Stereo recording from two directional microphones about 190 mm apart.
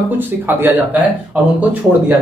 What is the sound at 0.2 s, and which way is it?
A man's voice, 10° right (ahead or behind).